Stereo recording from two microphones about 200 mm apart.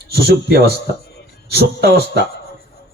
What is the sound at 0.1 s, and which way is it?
A man's voice, 50° right (ahead or behind).